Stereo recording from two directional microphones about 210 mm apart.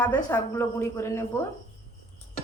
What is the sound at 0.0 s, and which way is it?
A woman's voice, 10° left (ahead or behind).